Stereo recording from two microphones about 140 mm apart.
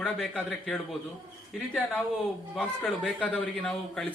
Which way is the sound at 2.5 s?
5° left (ahead or behind).